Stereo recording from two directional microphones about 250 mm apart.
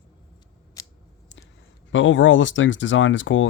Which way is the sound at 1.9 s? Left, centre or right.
Left.